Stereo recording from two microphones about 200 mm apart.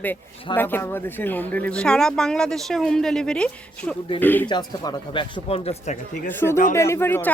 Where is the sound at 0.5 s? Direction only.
10° left (ahead or behind).